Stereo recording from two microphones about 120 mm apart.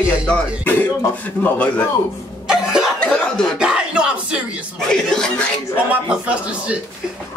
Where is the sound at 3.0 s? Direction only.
10° left (ahead or behind).